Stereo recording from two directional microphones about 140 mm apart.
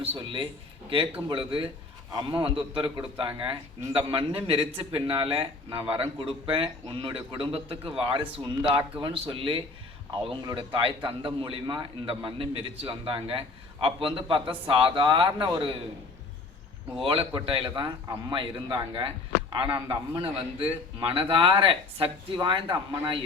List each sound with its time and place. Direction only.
0.0 s a man's voice: 40° right (ahead or behind)
17.0 s a man's voice: 40° right (ahead or behind)